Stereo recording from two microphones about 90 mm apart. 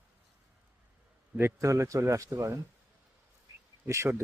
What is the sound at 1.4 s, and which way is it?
A man's voice, 30° right (ahead or behind).